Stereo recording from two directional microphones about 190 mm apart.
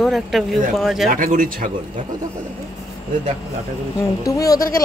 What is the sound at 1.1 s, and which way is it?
Speech, 45° right (ahead or behind).